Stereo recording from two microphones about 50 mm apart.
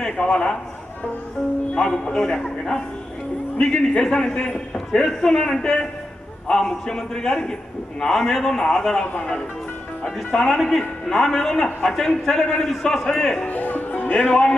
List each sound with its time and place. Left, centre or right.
0.2 s speech: left
1.8 s a man's voice: centre
9.0 s speech: left
10.0 s a man's voice: centre
13.5 s music: left